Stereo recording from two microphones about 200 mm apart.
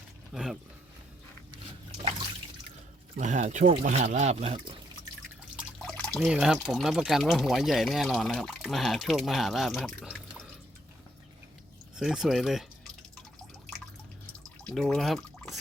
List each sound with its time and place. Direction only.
0.3 s speech: centre (ahead or behind)
3.2 s speech: 35° right (ahead or behind)
5.8 s speech: 5° left (ahead or behind)
11.9 s speech: centre (ahead or behind)
14.6 s speech: centre (ahead or behind)